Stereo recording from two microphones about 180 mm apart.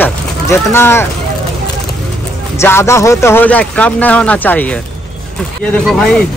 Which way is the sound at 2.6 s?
15° left (ahead or behind).